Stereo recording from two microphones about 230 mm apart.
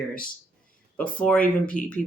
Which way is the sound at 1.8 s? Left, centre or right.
Left.